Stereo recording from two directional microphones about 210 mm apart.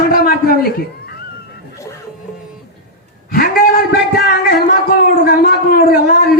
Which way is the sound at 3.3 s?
45° left (ahead or behind).